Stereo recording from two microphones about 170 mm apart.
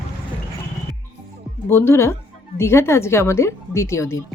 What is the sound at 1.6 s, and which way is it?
A woman's voice, 15° left (ahead or behind).